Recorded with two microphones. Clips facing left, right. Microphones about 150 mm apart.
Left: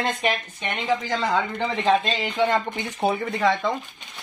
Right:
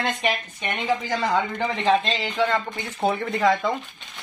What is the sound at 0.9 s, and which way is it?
Speech, 10° right (ahead or behind).